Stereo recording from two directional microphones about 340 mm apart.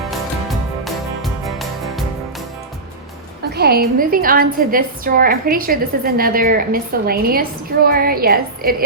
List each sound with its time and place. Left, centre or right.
0.1 s music: centre
3.5 s a woman's voice: right